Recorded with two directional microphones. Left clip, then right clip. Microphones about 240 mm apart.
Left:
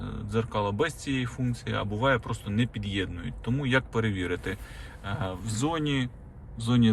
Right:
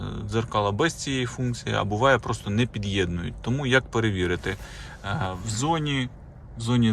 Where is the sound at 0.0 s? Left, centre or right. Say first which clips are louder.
Right 2 dB; centre.